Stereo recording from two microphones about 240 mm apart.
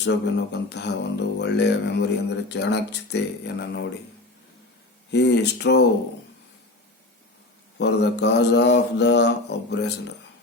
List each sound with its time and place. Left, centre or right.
0.0 s mantra: left
5.1 s mantra: left
7.8 s mantra: left